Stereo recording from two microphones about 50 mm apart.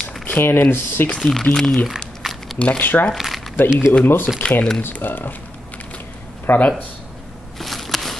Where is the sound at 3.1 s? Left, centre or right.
Centre.